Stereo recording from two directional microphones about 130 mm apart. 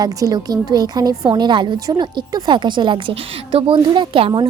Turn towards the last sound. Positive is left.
turn(degrees=-40)  # may be behind; listen again after turning